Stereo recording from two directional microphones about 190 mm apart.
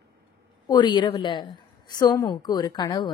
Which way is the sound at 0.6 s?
25° left (ahead or behind).